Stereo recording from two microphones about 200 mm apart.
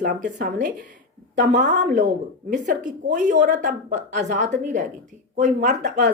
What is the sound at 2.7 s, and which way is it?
A woman's voice, 50° right (ahead or behind).